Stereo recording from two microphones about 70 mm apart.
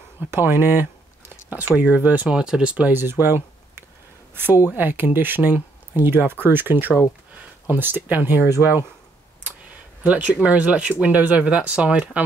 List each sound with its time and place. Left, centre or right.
0.3 s speech: right
2.2 s speech: centre
3.0 s speech: right
10.0 s speech: right